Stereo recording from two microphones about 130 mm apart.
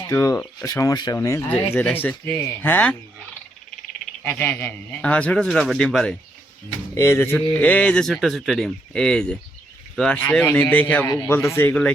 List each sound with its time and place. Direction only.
0.1 s speech: 20° left (ahead or behind)
1.5 s a man's voice: 10° left (ahead or behind)
4.3 s a man's voice: 15° left (ahead or behind)
6.9 s a man's voice: 20° left (ahead or behind)
11.1 s speech: 25° left (ahead or behind)
11.3 s a man's voice: 15° left (ahead or behind)